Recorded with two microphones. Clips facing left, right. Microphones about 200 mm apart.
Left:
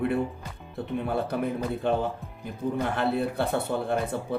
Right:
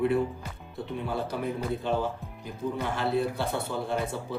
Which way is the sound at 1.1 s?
60° left (ahead or behind).